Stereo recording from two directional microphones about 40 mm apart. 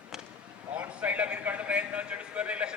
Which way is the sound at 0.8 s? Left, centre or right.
Right.